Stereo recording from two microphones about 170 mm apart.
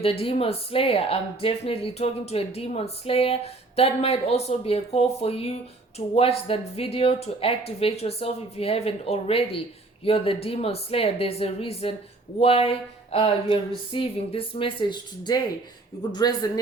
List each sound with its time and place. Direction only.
0.0 s speech: 35° left (ahead or behind)